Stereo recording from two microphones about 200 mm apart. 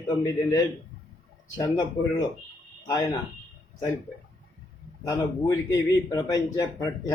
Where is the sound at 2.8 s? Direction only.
20° left (ahead or behind).